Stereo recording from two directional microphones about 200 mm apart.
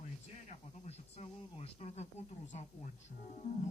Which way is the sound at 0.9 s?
30° left (ahead or behind).